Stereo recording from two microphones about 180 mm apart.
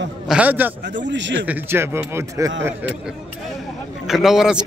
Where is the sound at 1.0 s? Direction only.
85° right.